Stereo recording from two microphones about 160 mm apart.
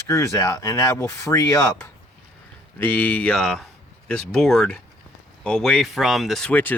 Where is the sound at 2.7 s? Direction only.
10° left (ahead or behind).